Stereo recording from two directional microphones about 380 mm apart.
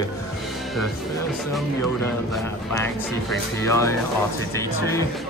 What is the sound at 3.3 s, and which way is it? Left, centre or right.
Speech, centre.